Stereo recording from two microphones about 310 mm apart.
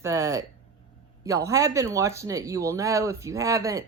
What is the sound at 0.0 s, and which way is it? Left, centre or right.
Speech, centre.